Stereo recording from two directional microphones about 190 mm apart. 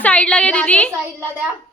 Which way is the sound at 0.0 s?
5° left (ahead or behind).